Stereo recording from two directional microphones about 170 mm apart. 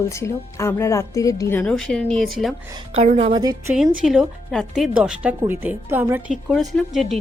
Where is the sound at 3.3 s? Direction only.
25° right (ahead or behind).